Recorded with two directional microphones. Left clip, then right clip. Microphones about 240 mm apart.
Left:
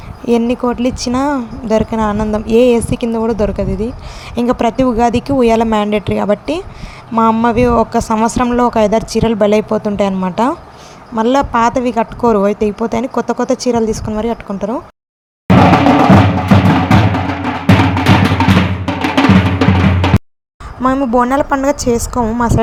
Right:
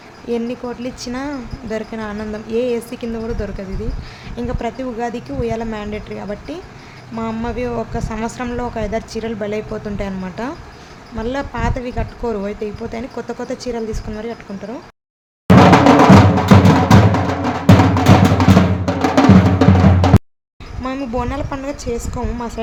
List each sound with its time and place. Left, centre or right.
0.3 s a woman's voice: left
16.6 s music: right
20.8 s a woman's voice: left